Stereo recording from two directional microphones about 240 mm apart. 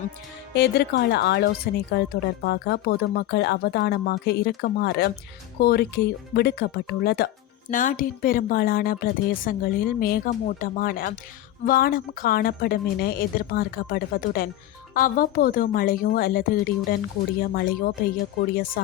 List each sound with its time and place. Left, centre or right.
0.5 s speech: left